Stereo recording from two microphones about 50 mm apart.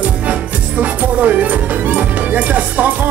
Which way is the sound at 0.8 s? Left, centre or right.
Right.